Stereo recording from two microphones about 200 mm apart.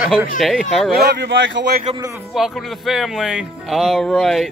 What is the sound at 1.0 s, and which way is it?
Speech, 55° right (ahead or behind).